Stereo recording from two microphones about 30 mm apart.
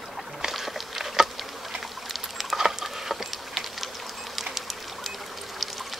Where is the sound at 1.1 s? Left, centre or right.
Centre.